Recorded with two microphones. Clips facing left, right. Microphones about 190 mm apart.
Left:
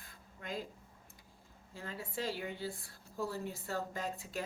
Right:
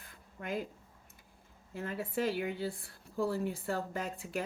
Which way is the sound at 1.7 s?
60° right (ahead or behind).